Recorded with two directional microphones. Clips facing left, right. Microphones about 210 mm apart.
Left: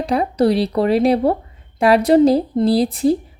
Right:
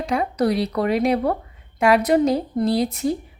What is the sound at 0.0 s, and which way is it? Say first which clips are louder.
A woman's voice: left 4 dB; 35° left (ahead or behind).